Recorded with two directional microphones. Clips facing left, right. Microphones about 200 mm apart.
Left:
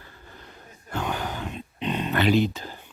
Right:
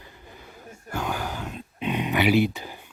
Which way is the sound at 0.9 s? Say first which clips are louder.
Even; 10° right (ahead or behind).